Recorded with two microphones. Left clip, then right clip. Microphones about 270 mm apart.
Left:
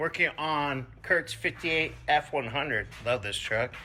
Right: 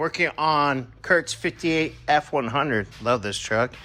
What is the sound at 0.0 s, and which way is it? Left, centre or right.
Speech, centre.